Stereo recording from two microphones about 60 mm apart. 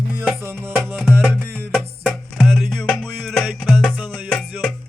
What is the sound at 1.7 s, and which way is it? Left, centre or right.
Music, centre.